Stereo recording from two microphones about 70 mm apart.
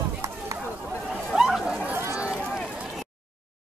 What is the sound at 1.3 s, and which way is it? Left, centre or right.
Chatter, centre.